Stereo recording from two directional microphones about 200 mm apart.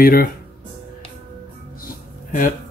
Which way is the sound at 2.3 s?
40° left (ahead or behind).